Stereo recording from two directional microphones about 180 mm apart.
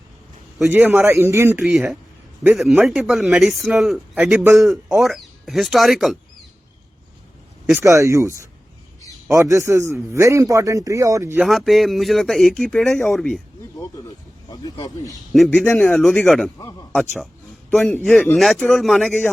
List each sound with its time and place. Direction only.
0.7 s a man's voice: 10° right (ahead or behind)
1.7 s speech: centre (ahead or behind)
7.7 s a man's voice: 15° right (ahead or behind)
9.3 s a man's voice: 15° right (ahead or behind)
11.4 s speech: centre (ahead or behind)
14.5 s speech: 20° left (ahead or behind)
15.3 s speech: 5° left (ahead or behind)